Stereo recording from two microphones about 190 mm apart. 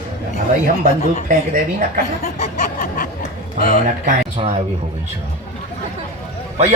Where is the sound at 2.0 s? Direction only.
35° left (ahead or behind).